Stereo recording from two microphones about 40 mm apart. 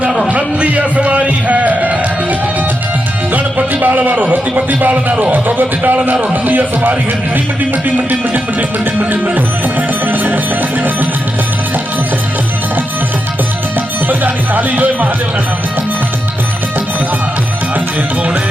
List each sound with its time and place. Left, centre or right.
0.3 s music: right
3.3 s a man's voice: right
5.3 s music: right
7.9 s music: right
14.1 s music: right